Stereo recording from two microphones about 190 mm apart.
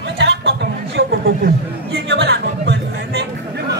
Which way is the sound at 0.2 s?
65° right (ahead or behind).